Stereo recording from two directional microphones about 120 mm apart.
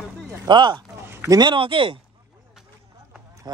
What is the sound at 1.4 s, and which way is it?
Speech, 45° right (ahead or behind).